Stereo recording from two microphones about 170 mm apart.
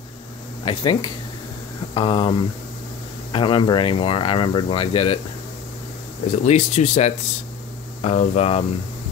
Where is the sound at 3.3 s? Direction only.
30° left (ahead or behind).